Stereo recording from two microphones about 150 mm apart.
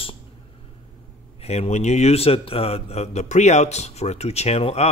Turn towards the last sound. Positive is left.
turn(degrees=45)  # may be behind; listen again after turning